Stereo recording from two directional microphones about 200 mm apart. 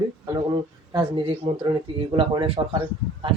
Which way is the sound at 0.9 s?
25° right (ahead or behind).